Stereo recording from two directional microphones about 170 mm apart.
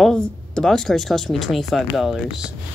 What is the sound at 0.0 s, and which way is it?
Speech, 5° left (ahead or behind).